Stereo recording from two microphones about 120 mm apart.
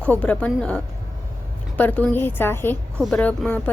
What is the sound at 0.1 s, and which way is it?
A woman's voice, 10° left (ahead or behind).